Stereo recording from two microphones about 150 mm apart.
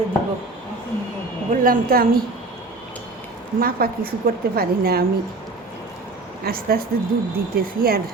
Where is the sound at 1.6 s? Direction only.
75° right (ahead or behind).